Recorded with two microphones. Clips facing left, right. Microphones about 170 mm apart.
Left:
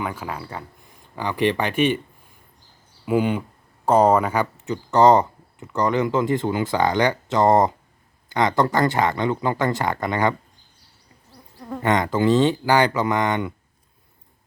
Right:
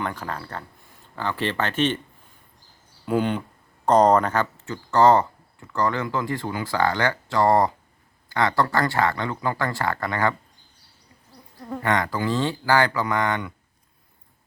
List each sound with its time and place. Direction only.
0.0 s speech: 10° left (ahead or behind)
3.1 s speech: 10° left (ahead or behind)
11.8 s speech: 20° left (ahead or behind)